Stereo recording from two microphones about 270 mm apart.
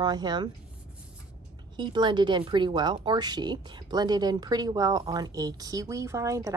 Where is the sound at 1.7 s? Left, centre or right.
Centre.